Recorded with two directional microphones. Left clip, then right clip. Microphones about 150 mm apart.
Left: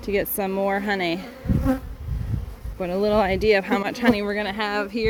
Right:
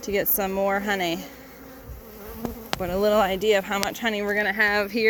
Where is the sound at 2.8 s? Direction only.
25° left (ahead or behind).